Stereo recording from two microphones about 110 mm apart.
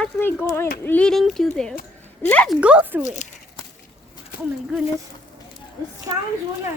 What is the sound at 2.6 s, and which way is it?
Speech, 10° right (ahead or behind).